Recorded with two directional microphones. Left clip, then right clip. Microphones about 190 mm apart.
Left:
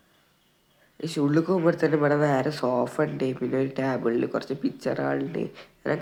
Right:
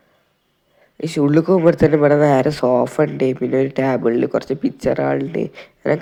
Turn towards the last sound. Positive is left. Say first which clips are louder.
# right 9 dB
turn(degrees=-30)  # may be behind; listen again after turning